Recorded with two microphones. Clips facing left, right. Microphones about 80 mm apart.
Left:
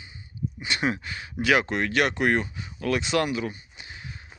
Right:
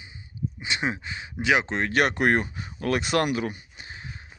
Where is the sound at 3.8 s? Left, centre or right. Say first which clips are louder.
Right 1 dB; right.